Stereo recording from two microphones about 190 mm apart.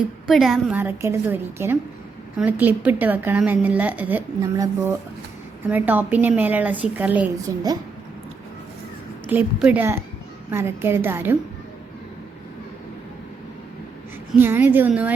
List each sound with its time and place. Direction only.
0.3 s a woman's voice: centre (ahead or behind)
0.8 s a woman's voice: 10° right (ahead or behind)
7.5 s a woman's voice: 20° right (ahead or behind)
9.2 s a woman's voice: 10° right (ahead or behind)
14.3 s a woman's voice: 10° right (ahead or behind)